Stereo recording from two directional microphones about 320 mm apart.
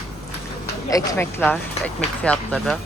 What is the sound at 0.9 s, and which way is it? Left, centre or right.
Speech, centre.